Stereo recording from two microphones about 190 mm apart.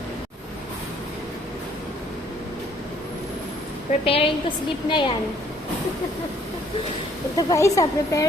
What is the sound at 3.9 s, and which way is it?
Speech, 30° left (ahead or behind).